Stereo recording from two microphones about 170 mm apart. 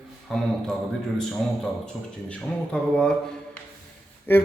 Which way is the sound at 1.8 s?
5° left (ahead or behind).